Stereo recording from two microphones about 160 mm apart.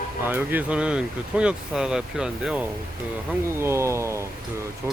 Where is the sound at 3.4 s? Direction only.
15° right (ahead or behind).